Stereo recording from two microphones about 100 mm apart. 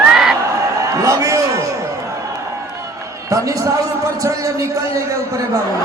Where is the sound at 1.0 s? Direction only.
30° right (ahead or behind).